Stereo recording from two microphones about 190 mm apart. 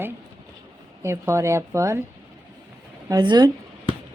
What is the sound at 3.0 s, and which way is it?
Speech, 20° right (ahead or behind).